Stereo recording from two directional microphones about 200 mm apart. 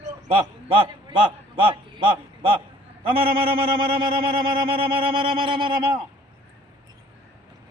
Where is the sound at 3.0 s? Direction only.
25° right (ahead or behind).